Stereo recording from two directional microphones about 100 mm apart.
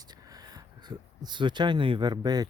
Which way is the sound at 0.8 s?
45° right (ahead or behind).